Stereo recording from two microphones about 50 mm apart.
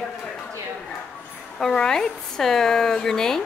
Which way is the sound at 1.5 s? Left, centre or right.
Centre.